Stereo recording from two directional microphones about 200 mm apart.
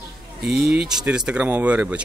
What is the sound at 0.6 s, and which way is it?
Speech, 55° right (ahead or behind).